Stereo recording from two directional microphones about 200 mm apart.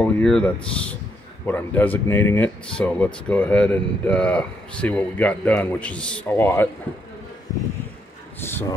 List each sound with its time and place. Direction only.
0.0 s speech: 5° left (ahead or behind)
8.4 s speech: 10° left (ahead or behind)